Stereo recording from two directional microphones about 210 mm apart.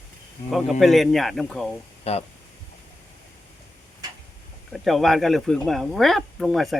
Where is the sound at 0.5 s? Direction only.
Centre (ahead or behind).